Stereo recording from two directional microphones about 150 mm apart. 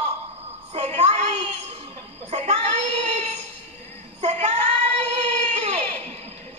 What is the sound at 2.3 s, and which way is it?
Child singing, 45° right (ahead or behind).